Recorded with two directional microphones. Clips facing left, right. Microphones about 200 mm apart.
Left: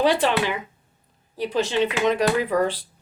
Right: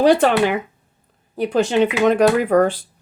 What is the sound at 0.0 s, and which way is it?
Speech, 45° right (ahead or behind).